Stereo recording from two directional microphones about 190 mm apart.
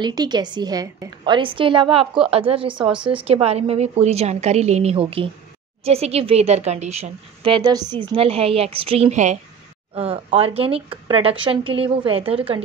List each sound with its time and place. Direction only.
0.0 s a woman's voice: 20° right (ahead or behind)